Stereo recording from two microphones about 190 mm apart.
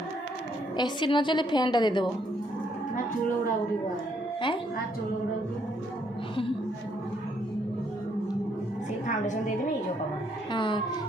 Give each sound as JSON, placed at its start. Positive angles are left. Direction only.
{"t": 0.8, "sound": "a woman's voice", "side_deg": 25}
{"t": 4.4, "sound": "a woman's voice", "side_deg": 25}
{"t": 10.5, "sound": "a woman's voice", "side_deg": 25}